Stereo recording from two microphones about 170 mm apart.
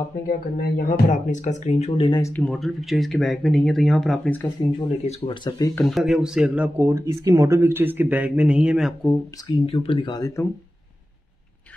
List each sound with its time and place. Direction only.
0.3 s speech: 50° left (ahead or behind)
2.0 s speech: 25° left (ahead or behind)
2.3 s speech: 5° left (ahead or behind)
4.6 s speech: 35° left (ahead or behind)
5.9 s speech: centre (ahead or behind)
9.5 s speech: 30° left (ahead or behind)